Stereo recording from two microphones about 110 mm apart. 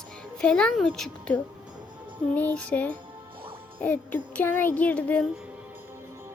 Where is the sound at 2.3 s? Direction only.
15° left (ahead or behind).